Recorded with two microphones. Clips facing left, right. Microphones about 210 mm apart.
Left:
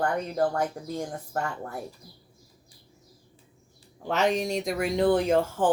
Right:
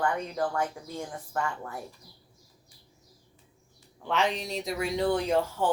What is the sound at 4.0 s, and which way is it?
Speech, 40° left (ahead or behind).